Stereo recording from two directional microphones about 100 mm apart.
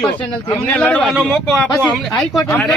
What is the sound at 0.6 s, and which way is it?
Speech, 15° left (ahead or behind).